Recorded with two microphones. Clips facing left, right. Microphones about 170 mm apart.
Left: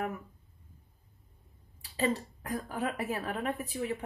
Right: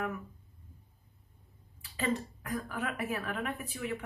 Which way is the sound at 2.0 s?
35° left (ahead or behind).